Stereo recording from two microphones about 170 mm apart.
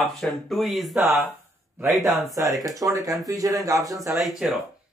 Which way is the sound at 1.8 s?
20° right (ahead or behind).